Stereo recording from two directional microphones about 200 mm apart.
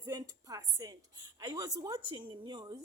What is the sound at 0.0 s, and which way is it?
A woman's voice, 20° right (ahead or behind).